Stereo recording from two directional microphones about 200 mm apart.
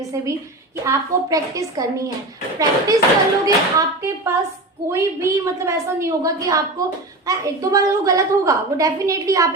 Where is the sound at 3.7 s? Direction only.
15° right (ahead or behind).